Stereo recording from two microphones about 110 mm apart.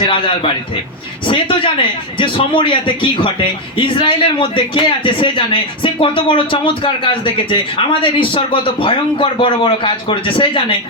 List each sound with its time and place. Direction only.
1.3 s a man's voice: 50° left (ahead or behind)